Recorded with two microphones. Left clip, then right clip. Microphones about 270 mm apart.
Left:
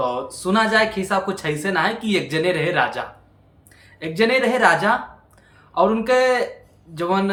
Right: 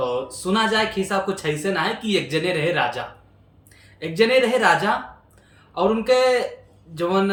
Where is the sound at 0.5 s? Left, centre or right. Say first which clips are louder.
Left 3 dB; centre.